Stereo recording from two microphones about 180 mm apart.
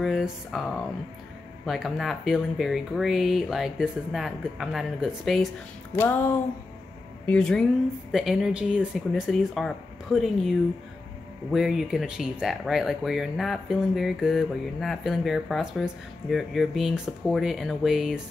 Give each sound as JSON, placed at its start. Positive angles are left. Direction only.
{"t": 0.0, "sound": "speech", "side_deg": 0}
{"t": 1.7, "sound": "speech", "side_deg": 0}
{"t": 5.9, "sound": "a sound", "side_deg": 10}
{"t": 7.2, "sound": "speech", "side_deg": 5}
{"t": 11.5, "sound": "speech", "side_deg": 0}